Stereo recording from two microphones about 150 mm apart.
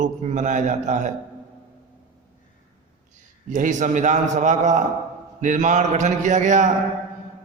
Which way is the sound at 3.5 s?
60° right (ahead or behind).